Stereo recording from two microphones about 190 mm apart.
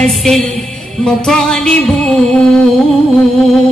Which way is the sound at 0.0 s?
Centre (ahead or behind).